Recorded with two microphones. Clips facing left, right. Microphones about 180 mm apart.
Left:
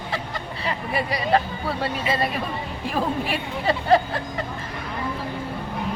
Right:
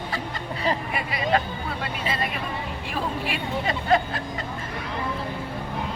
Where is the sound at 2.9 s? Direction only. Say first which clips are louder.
Left 4 dB; 35° left (ahead or behind).